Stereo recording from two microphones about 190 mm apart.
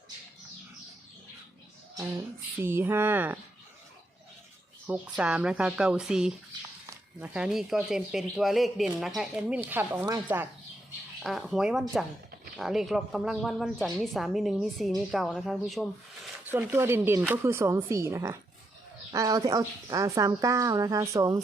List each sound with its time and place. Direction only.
2.0 s speech: 15° right (ahead or behind)
4.9 s a woman's voice: 5° right (ahead or behind)
16.5 s speech: 10° right (ahead or behind)